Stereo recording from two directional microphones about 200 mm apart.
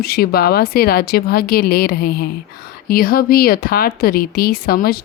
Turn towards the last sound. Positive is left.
turn(degrees=50)  # may be behind; listen again after turning